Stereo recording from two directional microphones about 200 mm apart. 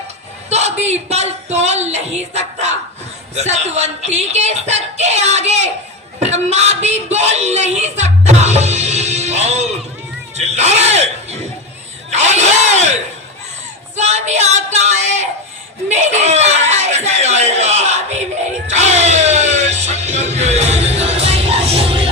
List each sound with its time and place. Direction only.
0.5 s speech: 35° right (ahead or behind)
12.1 s a sound: 35° right (ahead or behind)
13.9 s speech: 35° right (ahead or behind)
18.7 s music: 35° right (ahead or behind)